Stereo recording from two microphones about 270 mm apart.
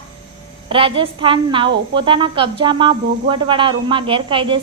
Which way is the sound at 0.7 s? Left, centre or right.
Centre.